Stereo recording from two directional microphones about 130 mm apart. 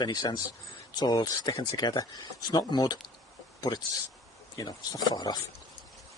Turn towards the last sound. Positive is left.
turn(degrees=30)  # may be behind; listen again after turning